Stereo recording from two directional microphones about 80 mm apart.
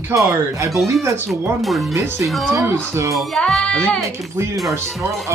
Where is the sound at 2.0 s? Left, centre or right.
Right.